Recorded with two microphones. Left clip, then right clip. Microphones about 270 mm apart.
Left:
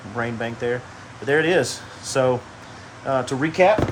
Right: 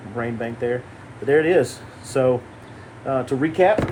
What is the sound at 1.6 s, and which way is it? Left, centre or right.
Speech, left.